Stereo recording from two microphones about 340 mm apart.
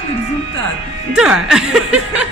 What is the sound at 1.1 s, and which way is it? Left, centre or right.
Speech, centre.